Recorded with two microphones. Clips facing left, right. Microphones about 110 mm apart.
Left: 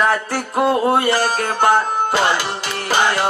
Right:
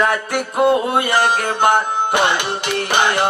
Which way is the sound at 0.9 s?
20° right (ahead or behind).